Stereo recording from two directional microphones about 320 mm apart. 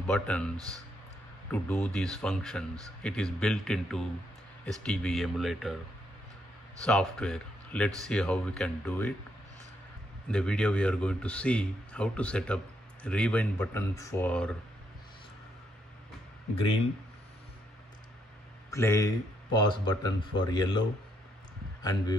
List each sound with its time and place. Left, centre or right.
0.0 s speech: centre
1.5 s a man's voice: centre
6.8 s a man's voice: centre
10.2 s a man's voice: centre
18.7 s speech: centre